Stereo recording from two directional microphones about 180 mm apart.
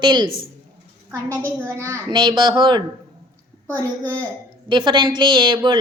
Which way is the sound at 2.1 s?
25° right (ahead or behind).